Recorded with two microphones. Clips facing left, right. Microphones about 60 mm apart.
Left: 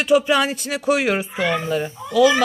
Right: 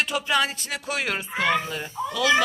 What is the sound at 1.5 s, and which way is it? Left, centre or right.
Speech, left.